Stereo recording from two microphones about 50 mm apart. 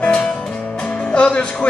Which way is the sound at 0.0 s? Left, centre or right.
Centre.